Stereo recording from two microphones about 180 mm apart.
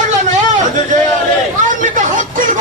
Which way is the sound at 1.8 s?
45° right (ahead or behind).